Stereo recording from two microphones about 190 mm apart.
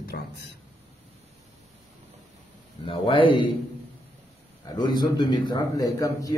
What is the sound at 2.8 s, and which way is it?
Speech, 25° left (ahead or behind).